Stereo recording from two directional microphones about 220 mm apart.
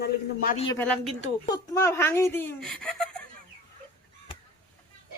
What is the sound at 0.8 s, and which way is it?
Speech, 5° left (ahead or behind).